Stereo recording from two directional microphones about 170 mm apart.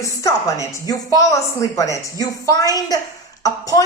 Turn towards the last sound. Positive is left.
turn(degrees=20)  # may be behind; listen again after turning